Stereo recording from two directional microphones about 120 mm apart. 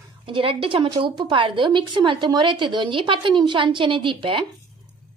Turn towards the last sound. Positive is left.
turn(degrees=-45)  # may be behind; listen again after turning